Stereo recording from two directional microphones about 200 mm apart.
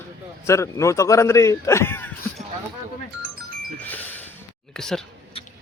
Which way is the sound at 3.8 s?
10° left (ahead or behind).